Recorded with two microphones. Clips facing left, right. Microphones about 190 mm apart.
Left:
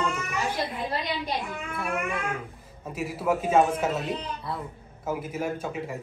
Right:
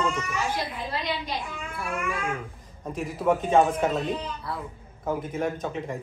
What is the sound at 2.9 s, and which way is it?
A man's voice, 5° left (ahead or behind).